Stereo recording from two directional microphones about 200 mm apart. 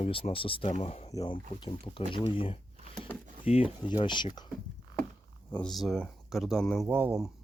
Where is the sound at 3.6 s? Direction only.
25° left (ahead or behind).